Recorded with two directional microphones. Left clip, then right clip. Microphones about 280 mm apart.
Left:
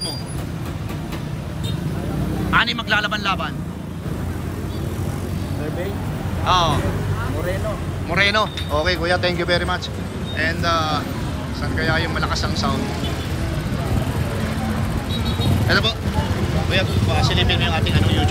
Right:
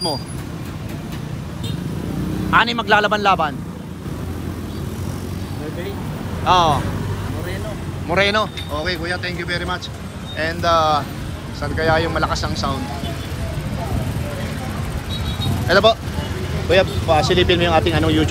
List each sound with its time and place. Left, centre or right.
2.5 s speech: centre
6.4 s speech: centre
8.1 s speech: centre
15.7 s speech: centre